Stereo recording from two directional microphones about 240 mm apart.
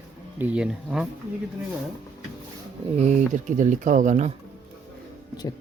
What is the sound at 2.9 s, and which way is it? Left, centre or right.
Speech, right.